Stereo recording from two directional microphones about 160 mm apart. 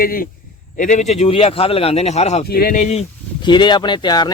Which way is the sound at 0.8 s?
50° left (ahead or behind).